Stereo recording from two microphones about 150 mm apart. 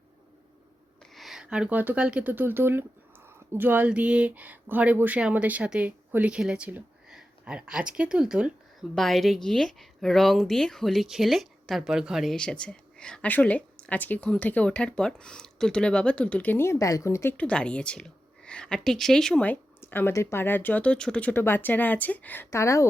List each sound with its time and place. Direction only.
1.1 s speech: centre (ahead or behind); by 22.9 s 20° left (ahead or behind)